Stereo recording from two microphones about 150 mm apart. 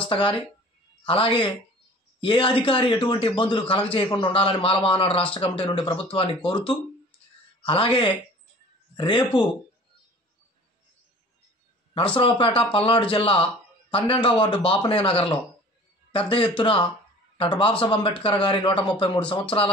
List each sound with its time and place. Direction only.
0.1 s a man's voice: 35° left (ahead or behind)
12.2 s a man's voice: 35° left (ahead or behind)